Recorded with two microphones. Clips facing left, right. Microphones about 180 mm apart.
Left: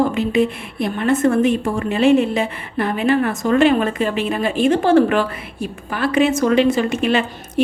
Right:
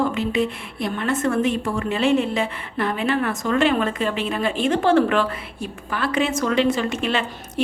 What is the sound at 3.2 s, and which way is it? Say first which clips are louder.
Speech: left 5 dB; 40° left (ahead or behind).